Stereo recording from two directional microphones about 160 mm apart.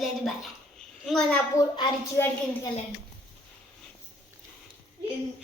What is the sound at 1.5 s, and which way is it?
Speech, 30° left (ahead or behind).